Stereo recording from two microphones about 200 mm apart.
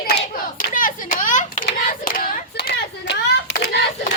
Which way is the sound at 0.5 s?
40° left (ahead or behind).